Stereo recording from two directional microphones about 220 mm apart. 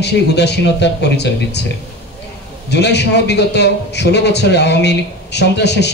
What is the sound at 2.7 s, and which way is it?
A man's voice, 50° left (ahead or behind).